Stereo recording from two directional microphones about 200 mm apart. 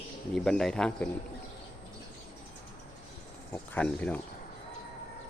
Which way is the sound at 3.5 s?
10° left (ahead or behind).